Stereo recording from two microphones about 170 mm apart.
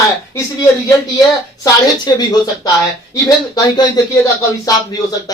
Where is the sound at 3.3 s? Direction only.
20° left (ahead or behind).